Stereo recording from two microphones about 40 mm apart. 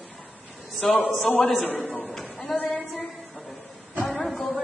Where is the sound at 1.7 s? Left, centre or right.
Left.